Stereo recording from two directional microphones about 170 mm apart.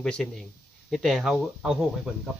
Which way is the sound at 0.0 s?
Centre (ahead or behind).